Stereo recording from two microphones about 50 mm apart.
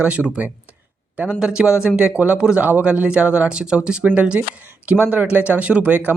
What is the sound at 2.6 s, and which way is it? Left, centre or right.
Speech, right.